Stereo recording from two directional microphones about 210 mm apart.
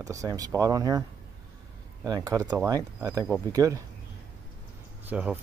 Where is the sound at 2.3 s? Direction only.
15° right (ahead or behind).